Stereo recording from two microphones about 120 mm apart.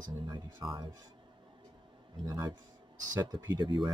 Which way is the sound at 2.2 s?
35° right (ahead or behind).